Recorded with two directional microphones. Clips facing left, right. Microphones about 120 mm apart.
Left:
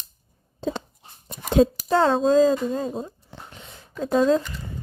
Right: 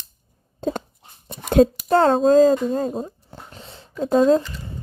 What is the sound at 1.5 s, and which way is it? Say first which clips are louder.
Speech: right 3 dB; 50° right (ahead or behind).